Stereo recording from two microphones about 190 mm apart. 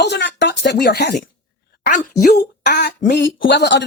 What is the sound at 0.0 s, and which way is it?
Speech, 65° left (ahead or behind).